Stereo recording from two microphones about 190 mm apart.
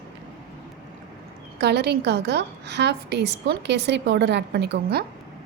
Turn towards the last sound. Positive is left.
turn(degrees=-60)  # may be behind; listen again after turning